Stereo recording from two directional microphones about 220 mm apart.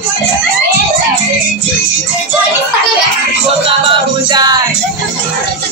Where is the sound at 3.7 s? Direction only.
20° right (ahead or behind).